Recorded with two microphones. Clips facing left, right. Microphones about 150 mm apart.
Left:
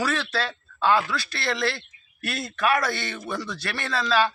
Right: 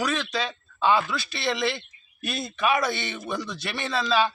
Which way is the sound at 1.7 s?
20° right (ahead or behind).